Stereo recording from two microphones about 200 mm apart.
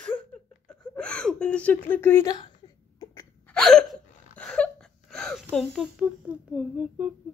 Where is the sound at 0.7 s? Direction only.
5° left (ahead or behind).